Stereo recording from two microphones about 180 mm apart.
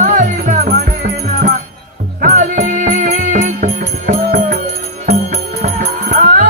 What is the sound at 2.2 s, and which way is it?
Music, 45° right (ahead or behind).